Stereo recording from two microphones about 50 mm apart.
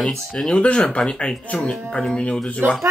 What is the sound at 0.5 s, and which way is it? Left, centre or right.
Speech, centre.